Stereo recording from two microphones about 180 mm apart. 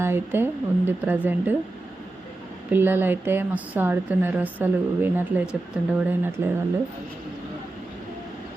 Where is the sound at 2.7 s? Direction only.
10° right (ahead or behind).